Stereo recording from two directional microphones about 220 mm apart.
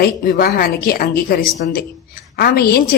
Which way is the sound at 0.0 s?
40° left (ahead or behind).